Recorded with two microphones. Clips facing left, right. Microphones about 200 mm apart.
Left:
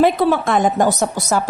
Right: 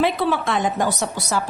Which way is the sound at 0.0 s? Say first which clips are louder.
Left 5 dB; 45° left (ahead or behind).